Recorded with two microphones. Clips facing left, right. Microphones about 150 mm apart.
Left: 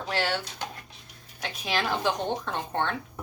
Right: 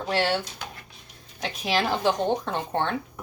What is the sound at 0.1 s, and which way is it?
Speech, 20° right (ahead or behind).